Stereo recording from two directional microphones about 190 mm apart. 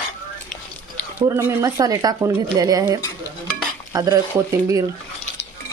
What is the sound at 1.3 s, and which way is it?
Speech, 15° right (ahead or behind).